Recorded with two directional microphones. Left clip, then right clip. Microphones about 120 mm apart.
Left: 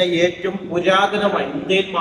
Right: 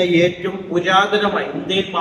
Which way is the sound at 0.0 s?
10° right (ahead or behind).